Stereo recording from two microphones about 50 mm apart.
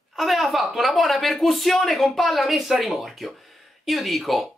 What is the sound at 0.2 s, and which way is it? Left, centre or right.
Speech, centre.